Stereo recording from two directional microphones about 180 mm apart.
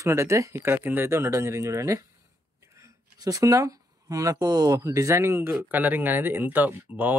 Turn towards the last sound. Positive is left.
turn(degrees=-10)  # may be behind; listen again after turning